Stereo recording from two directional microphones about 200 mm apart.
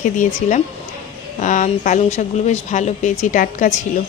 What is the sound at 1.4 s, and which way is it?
Speech, 40° left (ahead or behind).